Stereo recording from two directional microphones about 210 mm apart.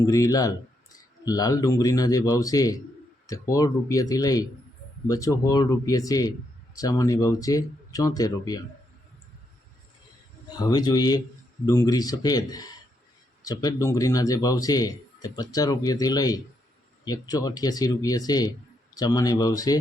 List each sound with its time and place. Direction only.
0.0 s a man's voice: 15° left (ahead or behind)
10.5 s a man's voice: 20° left (ahead or behind)